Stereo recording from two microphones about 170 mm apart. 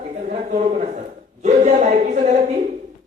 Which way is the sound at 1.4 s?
45° right (ahead or behind).